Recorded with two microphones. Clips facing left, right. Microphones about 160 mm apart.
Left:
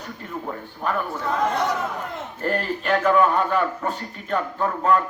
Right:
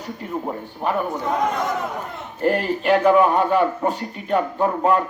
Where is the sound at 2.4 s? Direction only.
15° right (ahead or behind).